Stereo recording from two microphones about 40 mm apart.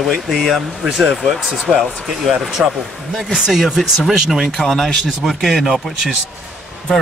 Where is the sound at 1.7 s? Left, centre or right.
Centre.